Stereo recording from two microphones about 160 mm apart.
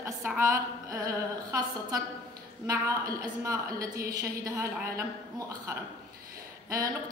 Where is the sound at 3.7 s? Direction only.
65° right (ahead or behind).